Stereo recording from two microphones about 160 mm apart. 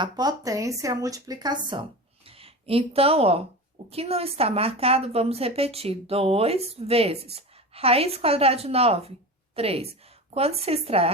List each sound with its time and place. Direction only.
0.0 s a woman's voice: 25° right (ahead or behind)